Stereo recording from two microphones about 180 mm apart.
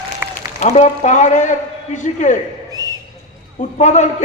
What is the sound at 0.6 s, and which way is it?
A man's voice, 40° left (ahead or behind).